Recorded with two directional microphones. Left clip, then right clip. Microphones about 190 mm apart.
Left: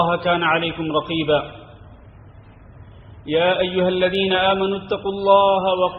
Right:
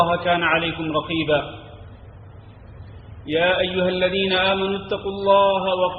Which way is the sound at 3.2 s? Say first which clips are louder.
Left 1 dB; 30° left (ahead or behind).